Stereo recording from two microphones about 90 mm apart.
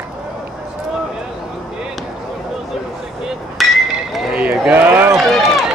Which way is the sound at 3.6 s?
Centre (ahead or behind).